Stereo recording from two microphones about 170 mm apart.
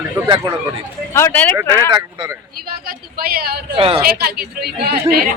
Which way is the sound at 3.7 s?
35° right (ahead or behind).